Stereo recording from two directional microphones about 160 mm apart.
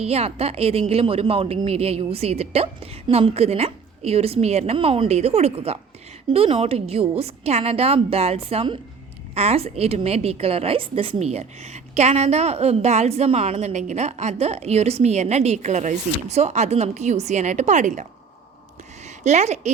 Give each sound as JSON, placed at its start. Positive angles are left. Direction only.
{"t": 0.0, "sound": "a woman's voice", "side_deg": -40}
{"t": 19.0, "sound": "speech", "side_deg": -45}